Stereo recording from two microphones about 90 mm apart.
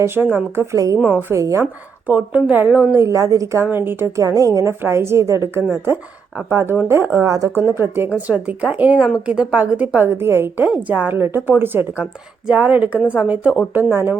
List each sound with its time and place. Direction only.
0.0 s a woman's voice: 25° right (ahead or behind)
2.0 s a woman's voice: 20° right (ahead or behind)
3.0 s a woman's voice: 35° right (ahead or behind)
8.1 s a woman's voice: 15° right (ahead or behind)
13.9 s a woman's voice: 25° right (ahead or behind)